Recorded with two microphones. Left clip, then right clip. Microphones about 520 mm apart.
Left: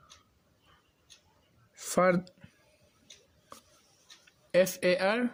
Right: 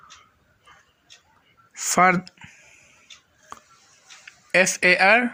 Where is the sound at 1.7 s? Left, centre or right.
Left.